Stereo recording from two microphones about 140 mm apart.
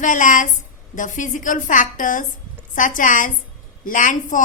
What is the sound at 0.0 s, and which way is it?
A woman's voice, 65° left (ahead or behind).